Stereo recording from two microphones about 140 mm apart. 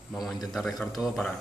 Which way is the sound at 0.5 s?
Centre (ahead or behind).